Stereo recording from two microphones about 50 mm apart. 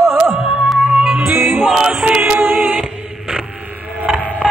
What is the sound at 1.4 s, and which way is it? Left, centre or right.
Music, right.